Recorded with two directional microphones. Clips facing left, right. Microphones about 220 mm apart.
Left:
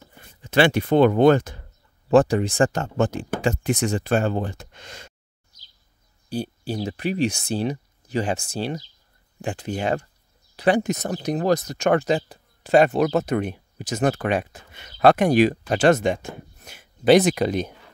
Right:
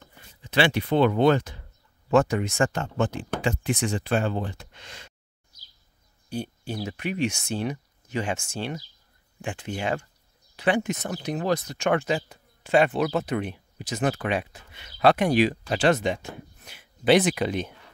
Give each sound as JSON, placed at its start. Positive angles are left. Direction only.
{"t": 0.2, "sound": "speech", "side_deg": 50}
{"t": 2.0, "sound": "speech", "side_deg": 35}
{"t": 6.2, "sound": "speech", "side_deg": 35}